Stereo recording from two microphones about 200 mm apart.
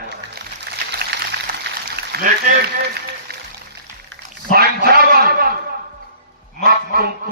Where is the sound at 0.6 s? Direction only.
55° right (ahead or behind).